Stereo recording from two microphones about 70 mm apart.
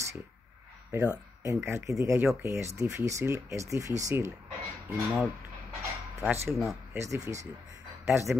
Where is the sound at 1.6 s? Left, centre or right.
Right.